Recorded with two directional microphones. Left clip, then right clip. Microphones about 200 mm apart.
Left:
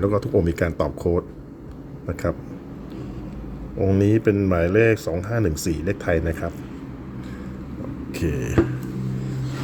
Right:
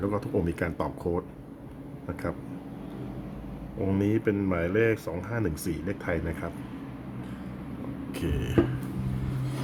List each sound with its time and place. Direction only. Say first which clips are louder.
0.0 s speech: left 8 dB; 20° left (ahead or behind)
3.8 s speech: left 8 dB; 20° left (ahead or behind)
8.1 s music: left 7 dB; 15° left (ahead or behind)